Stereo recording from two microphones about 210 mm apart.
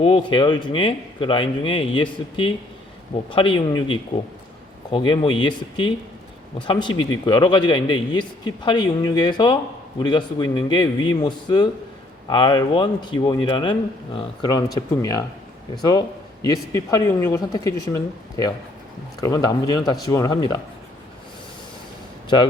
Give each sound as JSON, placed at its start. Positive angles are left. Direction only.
{"t": 0.0, "sound": "a man's voice", "side_deg": 25}
{"t": 3.3, "sound": "a man's voice", "side_deg": 25}